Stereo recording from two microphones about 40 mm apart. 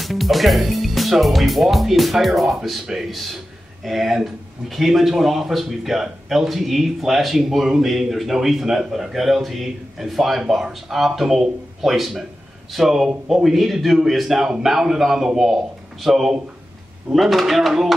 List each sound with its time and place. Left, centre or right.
0.0 s a man's voice: centre